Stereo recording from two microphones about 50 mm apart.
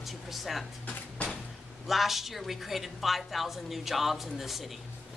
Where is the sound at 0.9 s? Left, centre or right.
Left.